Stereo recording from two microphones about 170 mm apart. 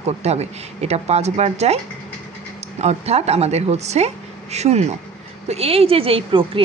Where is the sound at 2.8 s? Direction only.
40° right (ahead or behind).